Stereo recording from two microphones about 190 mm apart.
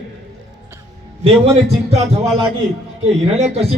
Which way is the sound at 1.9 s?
35° right (ahead or behind).